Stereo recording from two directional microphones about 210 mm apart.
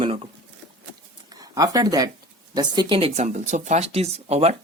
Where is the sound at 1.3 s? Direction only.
15° right (ahead or behind).